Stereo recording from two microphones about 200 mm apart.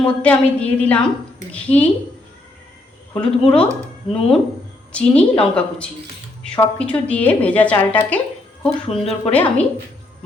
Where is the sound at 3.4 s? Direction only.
5° left (ahead or behind).